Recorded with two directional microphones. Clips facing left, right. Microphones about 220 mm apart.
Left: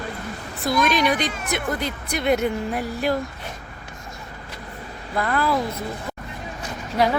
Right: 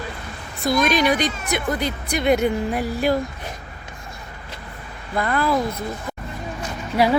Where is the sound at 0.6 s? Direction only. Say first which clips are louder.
Right 2 dB; centre (ahead or behind).